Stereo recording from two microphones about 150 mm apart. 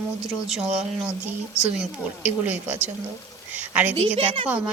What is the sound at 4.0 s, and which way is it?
Speech, 40° right (ahead or behind).